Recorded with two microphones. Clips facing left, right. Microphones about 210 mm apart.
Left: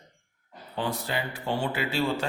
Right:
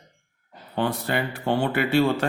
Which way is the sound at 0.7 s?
60° right (ahead or behind).